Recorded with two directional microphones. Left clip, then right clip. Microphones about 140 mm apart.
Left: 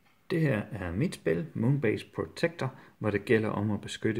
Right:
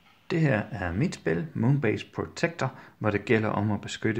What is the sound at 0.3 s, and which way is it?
Speech, 25° left (ahead or behind).